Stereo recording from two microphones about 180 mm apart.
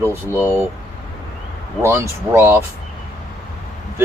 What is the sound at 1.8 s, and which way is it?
Speech, 15° right (ahead or behind).